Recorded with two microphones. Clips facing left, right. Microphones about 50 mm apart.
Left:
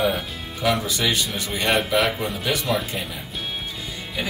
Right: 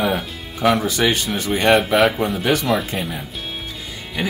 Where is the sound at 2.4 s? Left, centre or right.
Right.